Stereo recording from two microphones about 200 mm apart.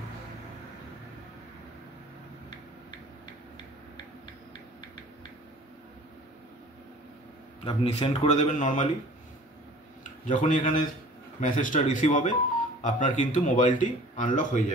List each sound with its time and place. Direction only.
7.6 s speech: 30° left (ahead or behind)
10.2 s speech: 40° left (ahead or behind)